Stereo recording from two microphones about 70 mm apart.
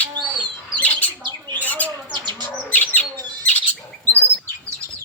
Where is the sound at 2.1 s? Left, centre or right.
Right.